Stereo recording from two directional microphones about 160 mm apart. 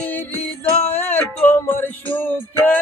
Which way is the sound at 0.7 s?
40° left (ahead or behind).